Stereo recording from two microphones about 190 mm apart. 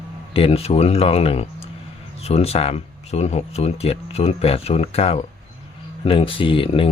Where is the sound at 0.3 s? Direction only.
30° left (ahead or behind).